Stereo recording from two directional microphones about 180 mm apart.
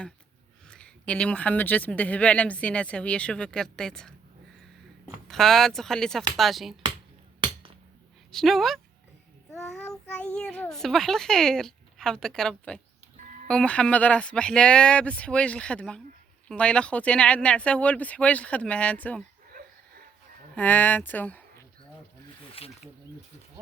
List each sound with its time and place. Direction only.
0.7 s speech: 5° left (ahead or behind)
5.3 s a child's voice: centre (ahead or behind)
8.3 s a child's voice: centre (ahead or behind)
20.6 s speech: 10° left (ahead or behind)
22.6 s speech: 30° left (ahead or behind)